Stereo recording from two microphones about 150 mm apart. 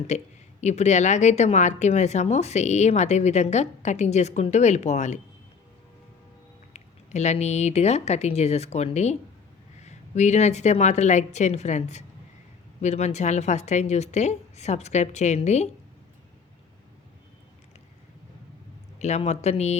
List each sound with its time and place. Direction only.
0.1 s speech: 50° left (ahead or behind)
6.7 s speech: 50° left (ahead or behind)
18.9 s speech: 50° left (ahead or behind)